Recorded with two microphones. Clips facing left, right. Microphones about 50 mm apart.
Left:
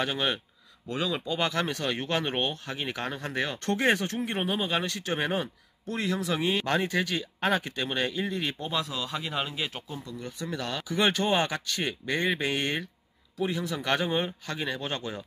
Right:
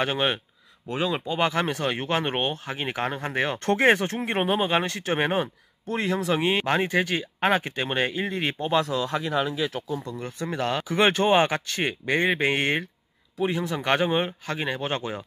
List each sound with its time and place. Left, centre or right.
0.0 s speech: right
8.6 s speech: right
10.0 s speech: right